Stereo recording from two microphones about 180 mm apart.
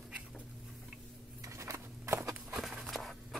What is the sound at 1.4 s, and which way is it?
Walk, 15° right (ahead or behind).